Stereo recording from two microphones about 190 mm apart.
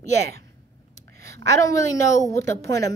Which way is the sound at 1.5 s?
15° left (ahead or behind).